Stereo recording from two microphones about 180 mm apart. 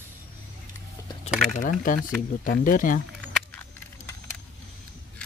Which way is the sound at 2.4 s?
50° left (ahead or behind).